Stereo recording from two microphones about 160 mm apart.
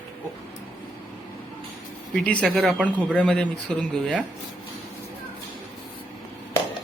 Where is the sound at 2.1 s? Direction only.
5° left (ahead or behind).